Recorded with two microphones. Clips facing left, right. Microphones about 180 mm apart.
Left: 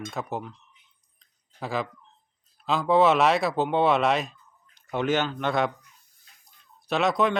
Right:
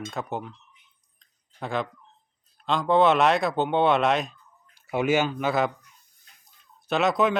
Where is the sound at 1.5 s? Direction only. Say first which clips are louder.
Right 1 dB; centre (ahead or behind).